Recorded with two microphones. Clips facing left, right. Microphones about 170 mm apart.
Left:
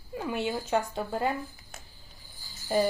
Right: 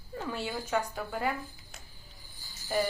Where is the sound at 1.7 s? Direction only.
50° left (ahead or behind).